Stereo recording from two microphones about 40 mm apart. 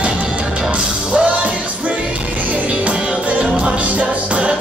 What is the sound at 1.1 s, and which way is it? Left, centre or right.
Music, right.